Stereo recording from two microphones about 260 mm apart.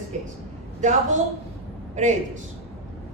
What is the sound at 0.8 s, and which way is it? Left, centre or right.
A woman's voice, right.